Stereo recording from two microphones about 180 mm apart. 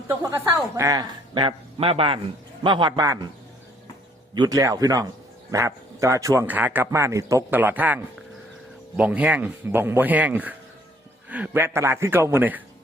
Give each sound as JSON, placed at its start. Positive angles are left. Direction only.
{"t": 0.1, "sound": "a man's voice", "side_deg": -20}
{"t": 4.4, "sound": "speech", "side_deg": -20}